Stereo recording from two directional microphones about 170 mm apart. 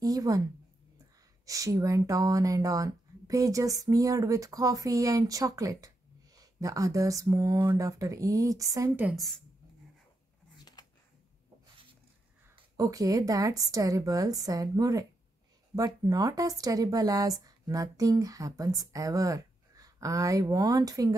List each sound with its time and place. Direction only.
0.0 s a sound: 20° right (ahead or behind)
1.4 s speech: 20° right (ahead or behind)
9.1 s a woman's voice: centre (ahead or behind)
12.5 s speech: 20° right (ahead or behind)